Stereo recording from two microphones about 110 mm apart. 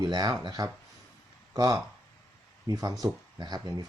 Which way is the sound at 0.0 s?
35° right (ahead or behind).